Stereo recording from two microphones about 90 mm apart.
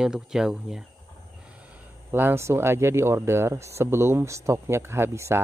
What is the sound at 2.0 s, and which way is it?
A man's voice, 25° right (ahead or behind).